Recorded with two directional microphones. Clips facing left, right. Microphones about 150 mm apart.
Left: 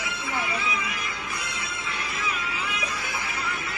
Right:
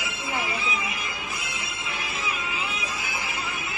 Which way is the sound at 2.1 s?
25° right (ahead or behind).